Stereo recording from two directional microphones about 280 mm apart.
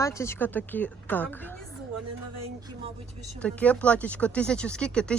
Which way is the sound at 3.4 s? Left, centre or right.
Centre.